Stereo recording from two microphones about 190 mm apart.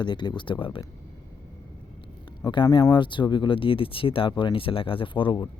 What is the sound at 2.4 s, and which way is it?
Speech, 20° left (ahead or behind).